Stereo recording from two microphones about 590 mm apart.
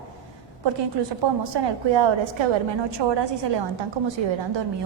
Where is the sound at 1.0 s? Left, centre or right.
Right.